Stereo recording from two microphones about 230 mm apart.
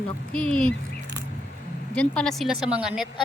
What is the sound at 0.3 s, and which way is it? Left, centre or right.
Speech, centre.